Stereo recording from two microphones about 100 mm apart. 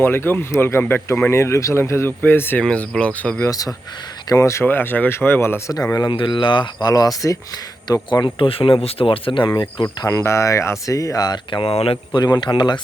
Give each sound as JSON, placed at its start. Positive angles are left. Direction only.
{"t": 0.0, "sound": "speech", "side_deg": 20}
{"t": 2.6, "sound": "speech", "side_deg": 10}
{"t": 3.4, "sound": "speech", "side_deg": 40}
{"t": 6.1, "sound": "speech", "side_deg": 55}
{"t": 8.4, "sound": "speech", "side_deg": 65}
{"t": 8.8, "sound": "speech", "side_deg": 75}
{"t": 9.8, "sound": "speech", "side_deg": 35}
{"t": 11.6, "sound": "speech", "side_deg": 80}
{"t": 12.1, "sound": "speech", "side_deg": 45}